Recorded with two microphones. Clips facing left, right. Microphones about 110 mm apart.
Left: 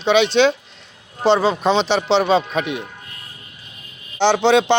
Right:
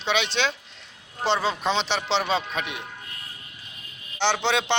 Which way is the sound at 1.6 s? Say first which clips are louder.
Left 8 dB; 50° left (ahead or behind).